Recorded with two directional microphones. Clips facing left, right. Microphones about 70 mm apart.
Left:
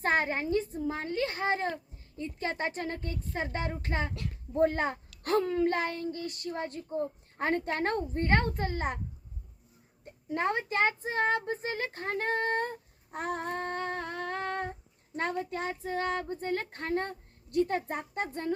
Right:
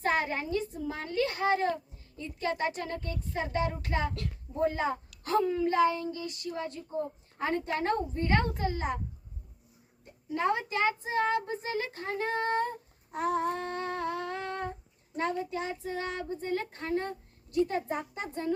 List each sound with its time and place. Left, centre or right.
0.0 s a woman's voice: left
4.5 s child singing: left
10.2 s a woman's voice: left
13.1 s humming: left
15.1 s child singing: left